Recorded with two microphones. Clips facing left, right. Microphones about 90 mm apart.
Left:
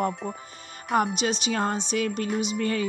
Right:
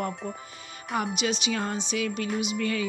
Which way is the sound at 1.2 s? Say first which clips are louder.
Left 2 dB; 40° left (ahead or behind).